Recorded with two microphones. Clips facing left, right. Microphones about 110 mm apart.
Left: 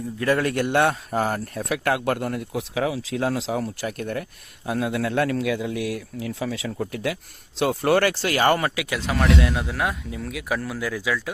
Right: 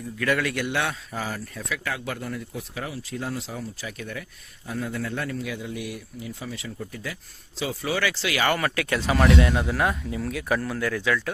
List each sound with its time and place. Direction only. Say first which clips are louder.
0.2 s a man's voice: left 3 dB; 35° left (ahead or behind)
0.5 s speech: left 7 dB; 50° left (ahead or behind)
8.7 s speech: right 1 dB; 10° left (ahead or behind)
9.0 s speech: right 1 dB; centre (ahead or behind)